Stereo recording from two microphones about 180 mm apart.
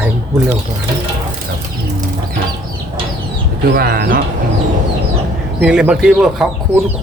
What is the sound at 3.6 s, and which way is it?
Speech, 55° right (ahead or behind).